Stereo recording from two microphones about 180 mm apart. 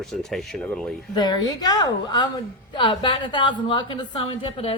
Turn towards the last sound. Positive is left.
turn(degrees=35)  # may be behind; listen again after turning